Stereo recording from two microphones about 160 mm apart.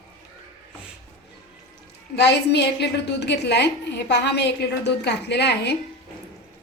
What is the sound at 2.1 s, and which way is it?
A woman's voice, 90° left.